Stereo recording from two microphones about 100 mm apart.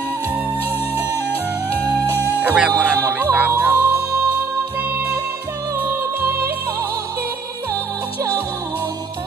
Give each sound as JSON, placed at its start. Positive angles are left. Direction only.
{"t": 1.8, "sound": "music", "side_deg": 20}
{"t": 2.4, "sound": "music", "side_deg": -15}
{"t": 5.8, "sound": "music", "side_deg": -20}